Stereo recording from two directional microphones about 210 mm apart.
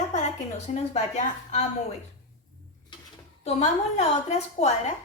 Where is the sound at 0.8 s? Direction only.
35° left (ahead or behind).